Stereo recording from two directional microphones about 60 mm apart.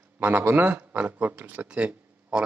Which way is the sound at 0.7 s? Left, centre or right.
Right.